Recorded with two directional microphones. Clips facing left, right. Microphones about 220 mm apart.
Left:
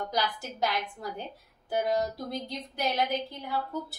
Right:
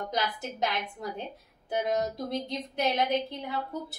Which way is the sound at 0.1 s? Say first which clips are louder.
Even; 20° right (ahead or behind).